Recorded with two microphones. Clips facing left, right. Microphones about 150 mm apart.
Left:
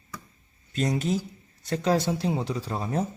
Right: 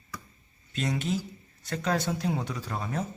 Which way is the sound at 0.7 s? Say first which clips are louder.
Left 4 dB; 40° left (ahead or behind).